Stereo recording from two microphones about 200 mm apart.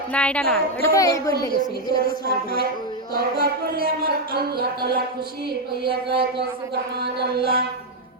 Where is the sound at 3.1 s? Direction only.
50° right (ahead or behind).